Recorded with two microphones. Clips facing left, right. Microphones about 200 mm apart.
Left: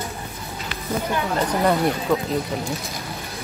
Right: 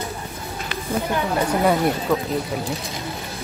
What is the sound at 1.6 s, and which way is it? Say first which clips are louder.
Speech: even; 5° right (ahead or behind).